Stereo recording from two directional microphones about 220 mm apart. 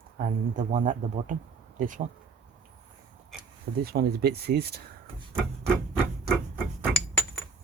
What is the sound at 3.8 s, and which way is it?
Speech, 45° right (ahead or behind).